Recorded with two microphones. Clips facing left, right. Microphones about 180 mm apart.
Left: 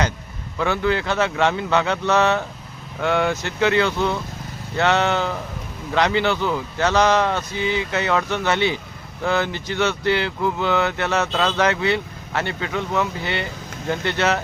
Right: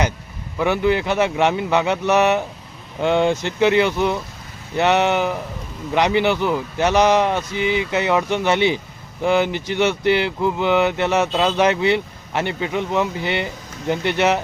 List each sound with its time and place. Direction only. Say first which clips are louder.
0.6 s speech: right 3 dB; 20° right (ahead or behind)